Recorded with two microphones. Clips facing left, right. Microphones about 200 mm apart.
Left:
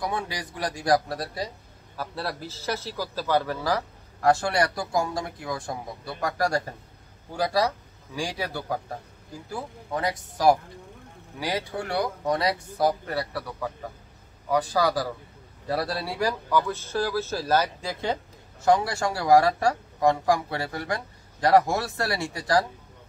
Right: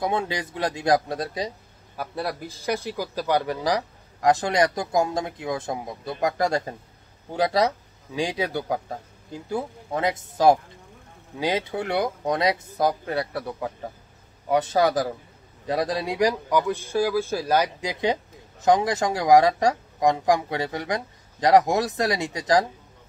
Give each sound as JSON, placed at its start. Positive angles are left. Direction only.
{"t": 0.0, "sound": "speech", "side_deg": -25}